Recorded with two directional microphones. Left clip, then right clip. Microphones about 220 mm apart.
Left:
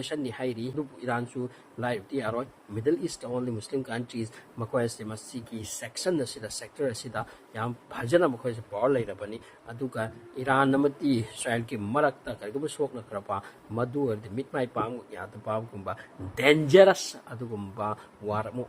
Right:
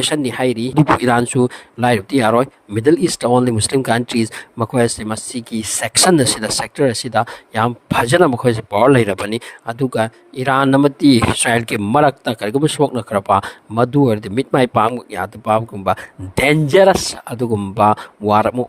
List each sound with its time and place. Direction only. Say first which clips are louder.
0.0 s speech: right 15 dB; 50° right (ahead or behind)